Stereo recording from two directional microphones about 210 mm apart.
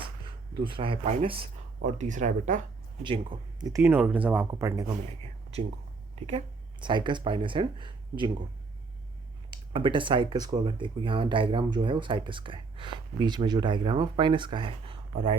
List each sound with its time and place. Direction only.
0.6 s speech: 25° right (ahead or behind)
3.0 s speech: 20° right (ahead or behind)
6.2 s speech: 25° right (ahead or behind)
9.5 s speech: 25° right (ahead or behind)